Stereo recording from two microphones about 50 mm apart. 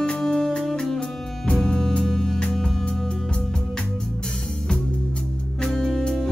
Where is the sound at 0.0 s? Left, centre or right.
Centre.